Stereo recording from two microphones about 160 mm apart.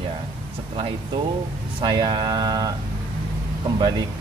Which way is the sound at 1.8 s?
30° right (ahead or behind).